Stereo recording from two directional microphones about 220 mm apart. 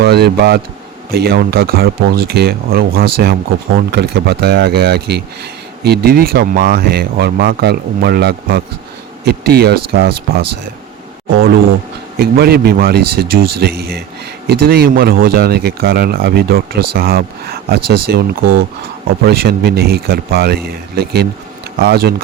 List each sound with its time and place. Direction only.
0.0 s speech: 45° right (ahead or behind)
12.1 s speech: 45° right (ahead or behind)